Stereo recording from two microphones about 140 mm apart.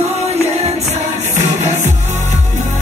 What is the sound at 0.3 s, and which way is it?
Music, 50° right (ahead or behind).